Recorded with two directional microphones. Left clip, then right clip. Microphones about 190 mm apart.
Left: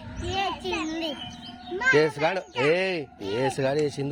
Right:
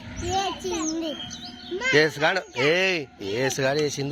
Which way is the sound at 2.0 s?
10° left (ahead or behind).